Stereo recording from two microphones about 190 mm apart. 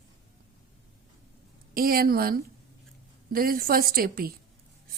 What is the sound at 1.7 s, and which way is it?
A woman's voice, 50° right (ahead or behind).